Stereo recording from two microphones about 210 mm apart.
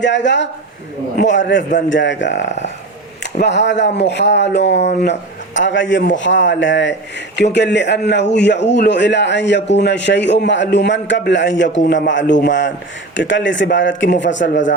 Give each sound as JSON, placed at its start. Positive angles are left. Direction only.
{"t": 0.0, "sound": "a man's voice", "side_deg": 60}